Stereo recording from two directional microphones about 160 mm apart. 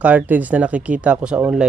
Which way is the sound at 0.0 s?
10° right (ahead or behind).